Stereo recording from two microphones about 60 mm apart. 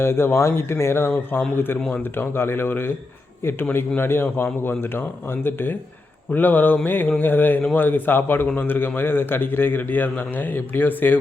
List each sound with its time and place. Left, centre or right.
0.0 s a man's voice: left